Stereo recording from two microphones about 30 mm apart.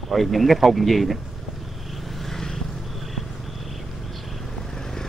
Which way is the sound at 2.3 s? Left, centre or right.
Centre.